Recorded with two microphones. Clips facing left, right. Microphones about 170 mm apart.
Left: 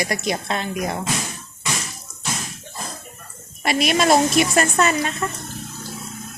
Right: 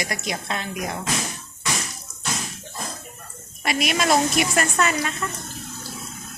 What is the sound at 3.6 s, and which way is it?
A woman's voice, 30° left (ahead or behind).